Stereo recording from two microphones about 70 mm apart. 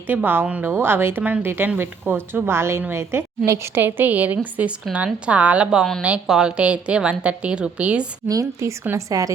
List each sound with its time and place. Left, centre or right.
0.1 s a woman's voice: right
0.7 s speech: right
3.8 s a woman's voice: right
8.3 s a woman's voice: right